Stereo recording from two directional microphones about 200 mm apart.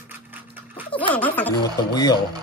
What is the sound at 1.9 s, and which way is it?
Speech, 20° left (ahead or behind).